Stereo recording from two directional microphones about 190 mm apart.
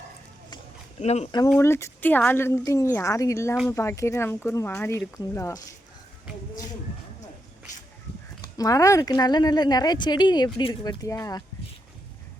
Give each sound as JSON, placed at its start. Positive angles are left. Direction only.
{"t": 0.9, "sound": "speech", "side_deg": 35}
{"t": 1.5, "sound": "a woman's voice", "side_deg": 15}
{"t": 8.5, "sound": "speech", "side_deg": 20}